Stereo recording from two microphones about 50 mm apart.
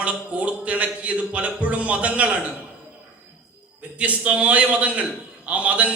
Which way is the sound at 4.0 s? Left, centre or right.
Right.